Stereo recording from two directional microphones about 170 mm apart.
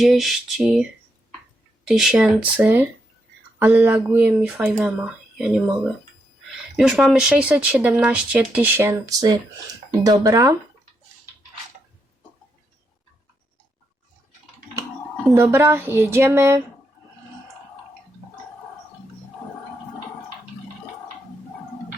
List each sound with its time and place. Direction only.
0.0 s speech: centre (ahead or behind)
1.9 s speech: 5° right (ahead or behind)
6.7 s speech: centre (ahead or behind); by 10.6 s 20° right (ahead or behind)
15.4 s speech: 15° right (ahead or behind)